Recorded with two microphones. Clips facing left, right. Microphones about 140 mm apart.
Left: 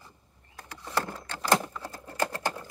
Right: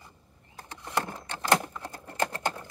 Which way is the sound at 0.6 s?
20° right (ahead or behind).